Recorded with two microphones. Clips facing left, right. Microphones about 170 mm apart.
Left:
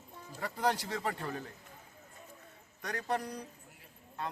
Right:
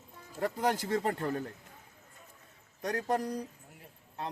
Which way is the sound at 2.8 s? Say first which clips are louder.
Right 4 dB; 45° right (ahead or behind).